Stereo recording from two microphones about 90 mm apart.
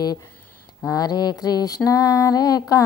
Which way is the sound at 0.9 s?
45° left (ahead or behind).